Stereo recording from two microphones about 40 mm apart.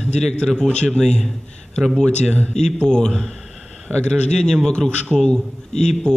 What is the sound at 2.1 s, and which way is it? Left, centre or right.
A man's voice, left.